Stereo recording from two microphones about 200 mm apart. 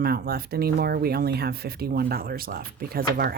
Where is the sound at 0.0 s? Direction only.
50° right (ahead or behind).